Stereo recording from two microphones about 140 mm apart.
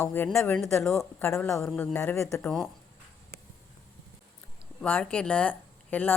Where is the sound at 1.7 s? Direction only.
15° left (ahead or behind).